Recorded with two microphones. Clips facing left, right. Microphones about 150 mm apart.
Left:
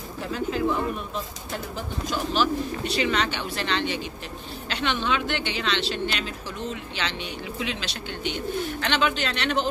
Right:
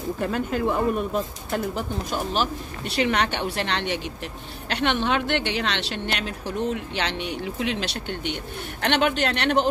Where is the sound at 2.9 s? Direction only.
70° right (ahead or behind).